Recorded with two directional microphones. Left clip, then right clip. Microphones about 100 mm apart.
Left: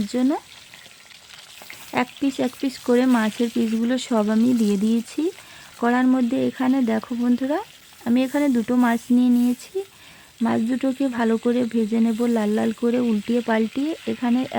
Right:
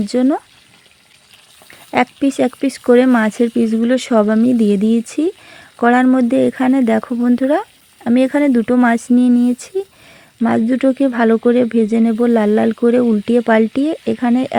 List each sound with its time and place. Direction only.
0.1 s speech: 30° right (ahead or behind)
1.9 s speech: 35° right (ahead or behind)
10.4 s speech: 35° right (ahead or behind)